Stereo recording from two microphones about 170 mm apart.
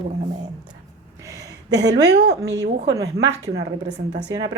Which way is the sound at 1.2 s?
20° right (ahead or behind).